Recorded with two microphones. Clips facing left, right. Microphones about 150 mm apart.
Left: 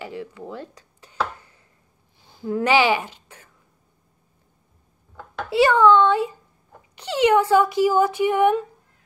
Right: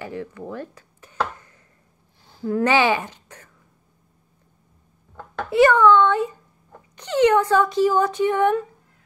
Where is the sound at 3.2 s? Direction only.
10° left (ahead or behind).